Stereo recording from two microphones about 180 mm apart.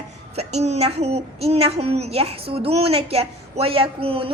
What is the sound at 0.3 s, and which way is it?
A woman's voice, 40° right (ahead or behind).